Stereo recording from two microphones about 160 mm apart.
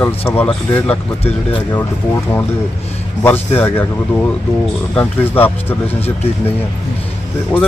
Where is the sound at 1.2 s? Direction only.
30° left (ahead or behind).